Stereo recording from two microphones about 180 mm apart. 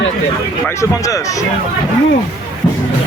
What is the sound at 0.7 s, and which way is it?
Speech, 15° left (ahead or behind).